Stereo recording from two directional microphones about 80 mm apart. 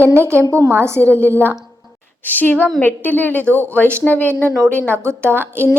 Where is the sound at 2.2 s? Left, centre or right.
Left.